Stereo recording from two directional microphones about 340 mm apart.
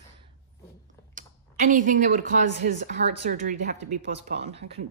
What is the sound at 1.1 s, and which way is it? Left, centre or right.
Speech, right.